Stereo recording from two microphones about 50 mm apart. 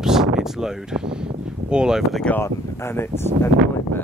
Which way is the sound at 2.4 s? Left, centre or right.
Left.